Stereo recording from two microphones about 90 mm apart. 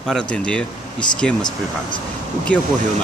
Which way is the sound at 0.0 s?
5° left (ahead or behind).